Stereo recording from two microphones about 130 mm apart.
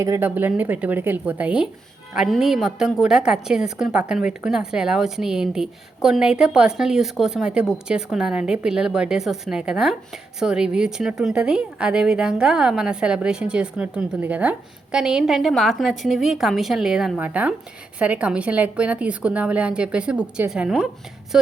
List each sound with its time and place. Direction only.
0.0 s a woman's voice: 20° right (ahead or behind); by 20.8 s 5° right (ahead or behind)